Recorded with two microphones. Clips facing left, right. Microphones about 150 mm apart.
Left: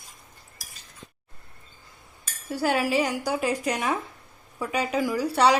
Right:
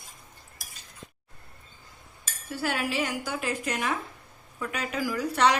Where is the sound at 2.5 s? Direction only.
40° left (ahead or behind).